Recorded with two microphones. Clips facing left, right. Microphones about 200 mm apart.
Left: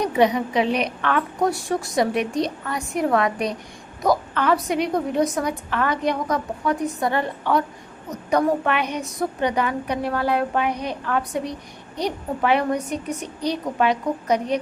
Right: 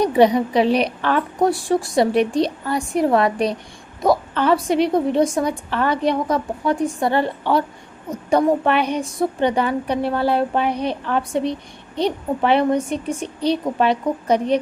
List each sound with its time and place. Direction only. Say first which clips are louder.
0.0 s a woman's voice: right 4 dB; 35° right (ahead or behind)